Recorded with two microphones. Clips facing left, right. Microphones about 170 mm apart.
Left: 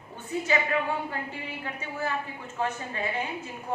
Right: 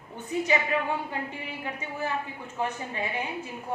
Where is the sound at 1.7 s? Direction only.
15° right (ahead or behind).